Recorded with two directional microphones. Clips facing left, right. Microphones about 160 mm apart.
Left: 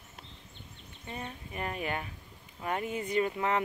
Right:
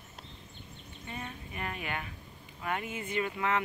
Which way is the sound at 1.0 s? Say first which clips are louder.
Left 1 dB; 35° left (ahead or behind).